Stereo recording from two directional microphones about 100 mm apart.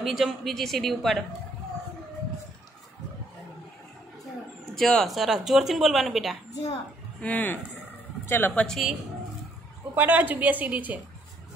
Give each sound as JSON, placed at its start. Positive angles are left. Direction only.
{"t": 0.0, "sound": "a woman's voice", "side_deg": 0}
{"t": 4.7, "sound": "a woman's voice", "side_deg": 5}
{"t": 7.2, "sound": "a woman's voice", "side_deg": 15}
{"t": 8.6, "sound": "a woman's voice", "side_deg": 0}
{"t": 9.9, "sound": "a woman's voice", "side_deg": -15}